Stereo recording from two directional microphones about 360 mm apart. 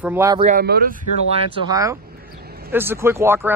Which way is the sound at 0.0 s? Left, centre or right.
Centre.